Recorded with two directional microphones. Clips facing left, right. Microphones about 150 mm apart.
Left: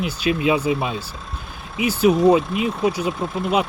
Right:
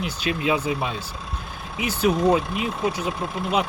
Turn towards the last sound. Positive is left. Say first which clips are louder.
# left 3 dB
turn(degrees=0)  # may be behind; listen again after turning